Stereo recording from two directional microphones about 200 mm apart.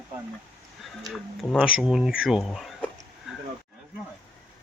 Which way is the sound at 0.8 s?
Centre (ahead or behind).